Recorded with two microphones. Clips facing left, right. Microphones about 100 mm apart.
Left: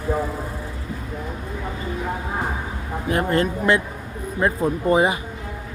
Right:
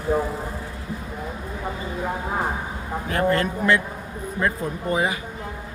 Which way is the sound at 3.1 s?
20° left (ahead or behind).